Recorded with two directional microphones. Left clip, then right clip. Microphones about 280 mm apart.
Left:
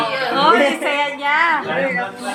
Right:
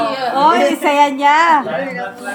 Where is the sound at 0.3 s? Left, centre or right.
Right.